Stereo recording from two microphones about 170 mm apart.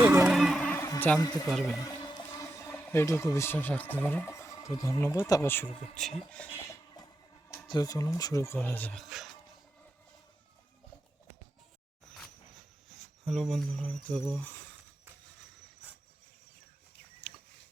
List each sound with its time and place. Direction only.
0.0 s a sound: 10° right (ahead or behind)
0.3 s a sound: centre (ahead or behind)
1.5 s speech: centre (ahead or behind)
1.8 s music: 20° left (ahead or behind)
2.8 s speech: 15° left (ahead or behind)
7.7 s speech: 20° left (ahead or behind); by 9.3 s centre (ahead or behind)
13.2 s speech: centre (ahead or behind)